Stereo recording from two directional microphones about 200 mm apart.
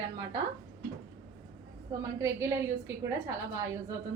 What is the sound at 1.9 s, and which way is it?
A woman's voice, 15° right (ahead or behind).